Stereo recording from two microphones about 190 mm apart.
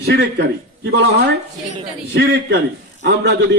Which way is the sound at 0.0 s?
60° right (ahead or behind).